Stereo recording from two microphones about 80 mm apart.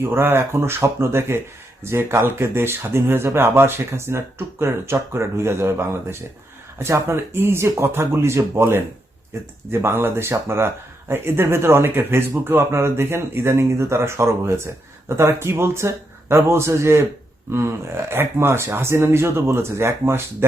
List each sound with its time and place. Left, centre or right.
0.0 s speech: right